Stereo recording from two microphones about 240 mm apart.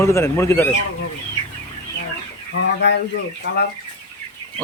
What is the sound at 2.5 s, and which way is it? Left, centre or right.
Speech, left.